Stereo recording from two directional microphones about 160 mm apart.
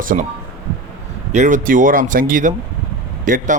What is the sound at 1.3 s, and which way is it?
Speech, 50° right (ahead or behind).